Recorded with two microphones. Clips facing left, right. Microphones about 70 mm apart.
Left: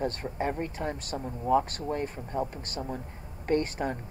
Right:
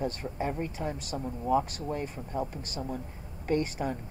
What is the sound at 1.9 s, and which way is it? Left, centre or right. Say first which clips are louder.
Speech: left 3 dB; left.